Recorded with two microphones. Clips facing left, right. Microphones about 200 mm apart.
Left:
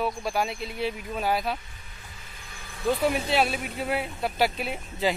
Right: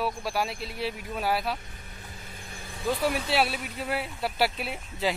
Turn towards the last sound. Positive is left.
turn(degrees=0)  # may be behind; listen again after turning